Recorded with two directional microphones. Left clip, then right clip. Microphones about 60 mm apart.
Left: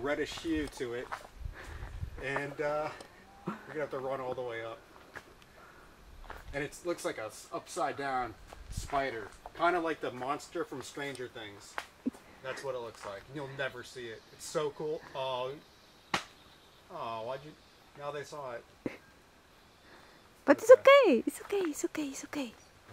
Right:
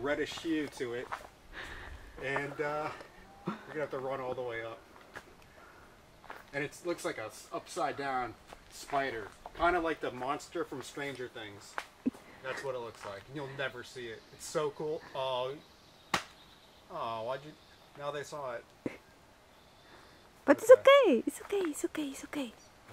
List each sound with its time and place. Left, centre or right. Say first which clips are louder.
0.0 s speech: even; centre
1.5 s sniff: right 5 dB; right
2.2 s speech: even; centre
6.2 s speech: even; centre
14.8 s speech: even; centre
16.9 s speech: right 2 dB; right
18.8 s speech: left 1 dB; centre
20.4 s speech: left 1 dB; centre
20.9 s speech: left 1 dB; left; by 22.5 s centre